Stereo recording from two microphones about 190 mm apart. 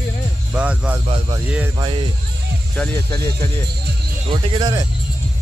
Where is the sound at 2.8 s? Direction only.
5° left (ahead or behind).